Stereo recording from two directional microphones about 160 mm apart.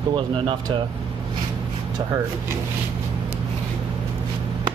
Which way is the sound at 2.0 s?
30° right (ahead or behind).